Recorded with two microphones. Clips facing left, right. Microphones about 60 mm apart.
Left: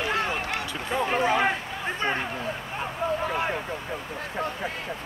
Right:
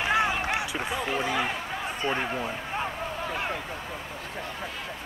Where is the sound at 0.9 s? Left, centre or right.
Left.